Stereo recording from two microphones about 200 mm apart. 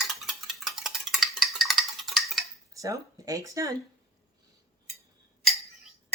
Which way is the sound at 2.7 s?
15° right (ahead or behind).